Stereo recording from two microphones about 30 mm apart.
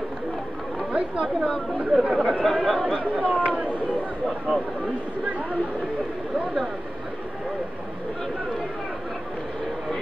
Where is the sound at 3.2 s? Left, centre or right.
Right.